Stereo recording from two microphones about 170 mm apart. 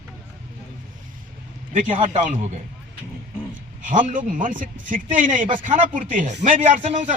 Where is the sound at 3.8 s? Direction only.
50° right (ahead or behind).